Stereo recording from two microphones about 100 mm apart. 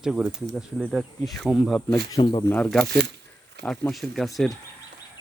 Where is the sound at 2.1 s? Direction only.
50° left (ahead or behind).